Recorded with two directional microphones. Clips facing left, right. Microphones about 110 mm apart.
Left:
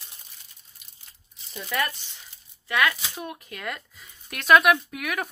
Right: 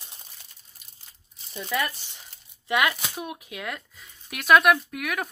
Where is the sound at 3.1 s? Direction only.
10° right (ahead or behind).